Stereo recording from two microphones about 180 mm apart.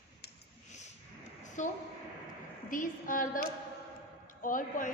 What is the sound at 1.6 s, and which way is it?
A woman's voice, 45° left (ahead or behind).